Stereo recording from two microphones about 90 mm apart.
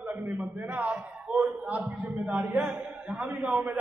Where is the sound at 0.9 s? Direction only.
5° right (ahead or behind).